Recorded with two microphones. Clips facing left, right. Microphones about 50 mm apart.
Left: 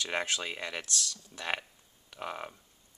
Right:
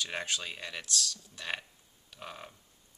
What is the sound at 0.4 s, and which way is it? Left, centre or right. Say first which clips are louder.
Speech: left 4 dB; left.